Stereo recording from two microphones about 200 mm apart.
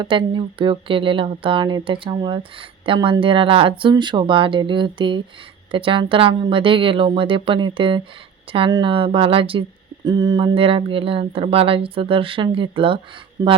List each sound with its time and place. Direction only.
0.0 s speech: 25° right (ahead or behind)